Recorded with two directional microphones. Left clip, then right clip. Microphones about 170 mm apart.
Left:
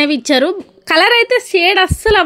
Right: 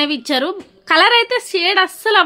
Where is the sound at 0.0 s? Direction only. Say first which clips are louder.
Left 5 dB; 30° left (ahead or behind).